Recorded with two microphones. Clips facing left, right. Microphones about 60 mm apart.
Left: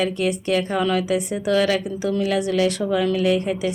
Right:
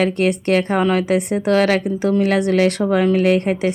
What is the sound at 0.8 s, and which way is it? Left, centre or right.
Speech, right.